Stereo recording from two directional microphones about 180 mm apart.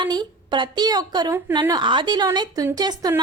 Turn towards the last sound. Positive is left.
turn(degrees=-20)  # may be behind; listen again after turning